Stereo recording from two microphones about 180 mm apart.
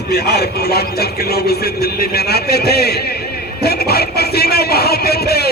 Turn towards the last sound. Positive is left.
turn(degrees=60)  # may be behind; listen again after turning